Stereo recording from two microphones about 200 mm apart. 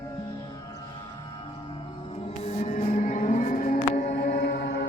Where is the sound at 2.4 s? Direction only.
35° left (ahead or behind).